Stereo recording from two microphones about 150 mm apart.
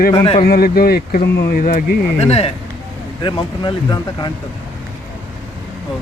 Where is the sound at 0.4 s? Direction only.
90° left; by 2.0 s 70° left (ahead or behind).